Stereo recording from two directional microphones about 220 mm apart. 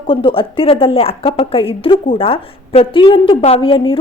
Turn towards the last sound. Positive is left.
turn(degrees=25)  # may be behind; listen again after turning